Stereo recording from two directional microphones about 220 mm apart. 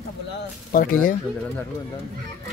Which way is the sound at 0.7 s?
40° left (ahead or behind).